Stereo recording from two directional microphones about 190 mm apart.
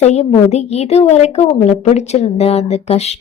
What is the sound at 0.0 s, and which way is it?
A woman's voice, 35° left (ahead or behind).